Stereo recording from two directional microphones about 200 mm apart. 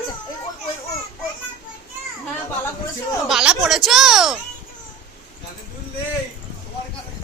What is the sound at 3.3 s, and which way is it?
Speech, centre (ahead or behind).